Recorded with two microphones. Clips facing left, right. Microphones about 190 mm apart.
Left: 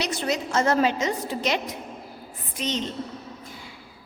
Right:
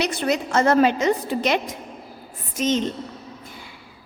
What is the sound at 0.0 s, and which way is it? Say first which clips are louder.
A woman's voice: right 4 dB; 60° right (ahead or behind).